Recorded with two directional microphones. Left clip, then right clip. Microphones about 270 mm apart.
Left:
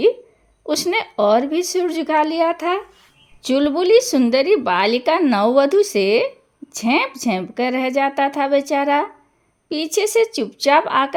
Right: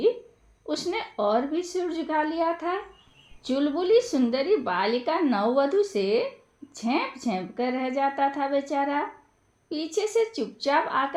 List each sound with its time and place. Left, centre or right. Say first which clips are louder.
0.6 s speech: left 10 dB; left